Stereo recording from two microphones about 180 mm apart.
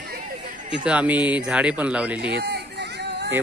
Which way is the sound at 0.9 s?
10° right (ahead or behind).